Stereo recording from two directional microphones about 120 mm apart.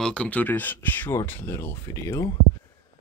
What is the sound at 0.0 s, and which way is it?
Speech, 10° left (ahead or behind).